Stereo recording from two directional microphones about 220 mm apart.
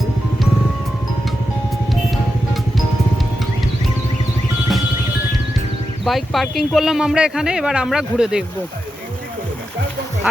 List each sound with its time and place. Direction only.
6.1 s speech: centre (ahead or behind)